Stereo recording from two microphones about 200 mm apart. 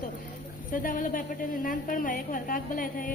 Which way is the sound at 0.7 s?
45° left (ahead or behind).